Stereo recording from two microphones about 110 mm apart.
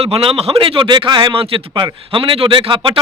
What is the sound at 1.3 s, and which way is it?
A man's voice, 55° right (ahead or behind).